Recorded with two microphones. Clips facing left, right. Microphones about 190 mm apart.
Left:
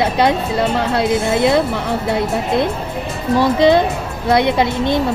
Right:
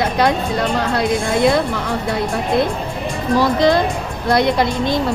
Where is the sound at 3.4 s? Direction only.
25° left (ahead or behind).